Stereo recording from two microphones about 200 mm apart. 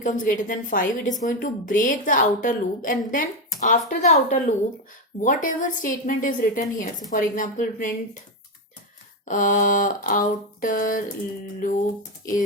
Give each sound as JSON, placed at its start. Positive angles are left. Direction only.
{"t": 0.0, "sound": "a woman's voice", "side_deg": 40}
{"t": 9.2, "sound": "a woman's voice", "side_deg": 40}